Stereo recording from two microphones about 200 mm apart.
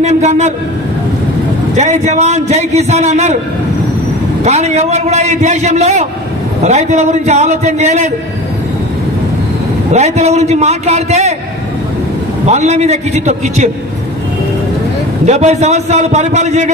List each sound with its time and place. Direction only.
0.0 s a man's voice: 35° right (ahead or behind)
1.8 s a man's voice: 35° right (ahead or behind)
4.5 s a man's voice: 35° right (ahead or behind)
9.9 s a man's voice: 35° right (ahead or behind)
12.4 s a man's voice: 35° right (ahead or behind)
15.2 s a man's voice: 35° right (ahead or behind)